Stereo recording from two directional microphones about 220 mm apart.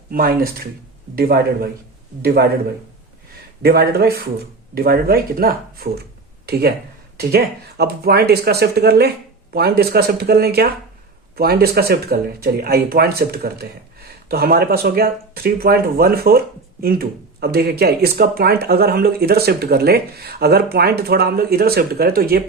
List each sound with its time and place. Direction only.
0.1 s speech: 40° right (ahead or behind)
3.6 s speech: 45° right (ahead or behind)